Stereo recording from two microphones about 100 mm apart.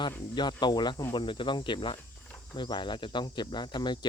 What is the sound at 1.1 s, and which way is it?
Speech, 55° left (ahead or behind).